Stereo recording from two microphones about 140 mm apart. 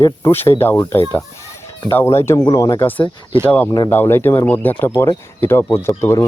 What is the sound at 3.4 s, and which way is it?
Speech, 10° left (ahead or behind).